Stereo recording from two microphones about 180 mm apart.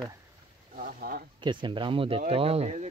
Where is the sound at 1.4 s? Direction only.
25° right (ahead or behind).